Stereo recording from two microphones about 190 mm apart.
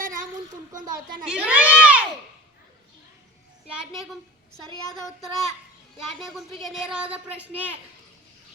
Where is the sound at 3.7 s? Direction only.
Centre (ahead or behind).